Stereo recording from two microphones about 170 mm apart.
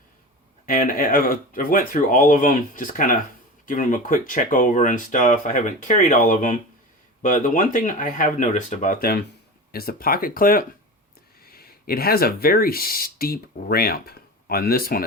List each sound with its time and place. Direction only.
0.6 s speech: 55° left (ahead or behind)